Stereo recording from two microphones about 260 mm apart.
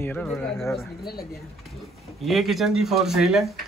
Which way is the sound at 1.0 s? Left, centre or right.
Left.